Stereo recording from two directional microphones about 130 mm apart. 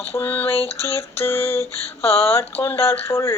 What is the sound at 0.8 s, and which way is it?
Speech, 20° left (ahead or behind).